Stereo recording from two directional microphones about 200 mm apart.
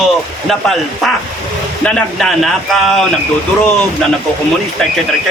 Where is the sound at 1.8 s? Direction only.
5° left (ahead or behind).